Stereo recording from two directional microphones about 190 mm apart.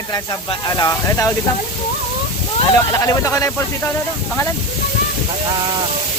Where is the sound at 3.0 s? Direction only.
15° left (ahead or behind).